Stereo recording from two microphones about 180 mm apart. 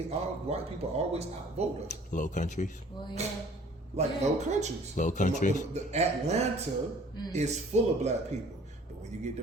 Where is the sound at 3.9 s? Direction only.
40° right (ahead or behind).